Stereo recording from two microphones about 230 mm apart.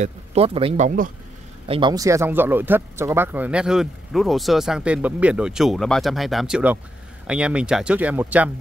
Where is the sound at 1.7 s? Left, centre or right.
Centre.